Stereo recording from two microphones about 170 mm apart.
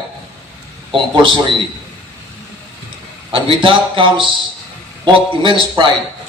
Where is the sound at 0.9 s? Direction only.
30° right (ahead or behind).